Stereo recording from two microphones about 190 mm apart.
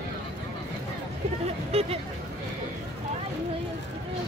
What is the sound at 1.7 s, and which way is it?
Speech, 30° right (ahead or behind).